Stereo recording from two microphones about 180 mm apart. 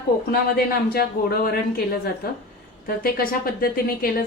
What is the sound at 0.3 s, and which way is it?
Speech, 60° left (ahead or behind).